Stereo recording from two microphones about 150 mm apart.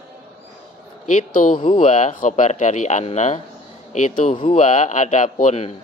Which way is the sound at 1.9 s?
55° left (ahead or behind).